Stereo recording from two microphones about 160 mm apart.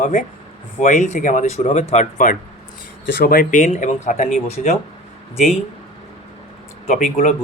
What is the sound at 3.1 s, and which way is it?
Speech, 65° left (ahead or behind).